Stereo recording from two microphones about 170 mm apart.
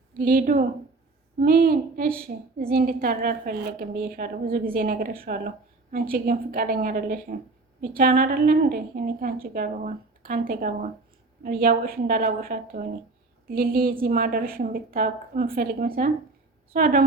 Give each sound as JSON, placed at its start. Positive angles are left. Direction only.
{"t": 0.2, "sound": "a woman's voice", "side_deg": -55}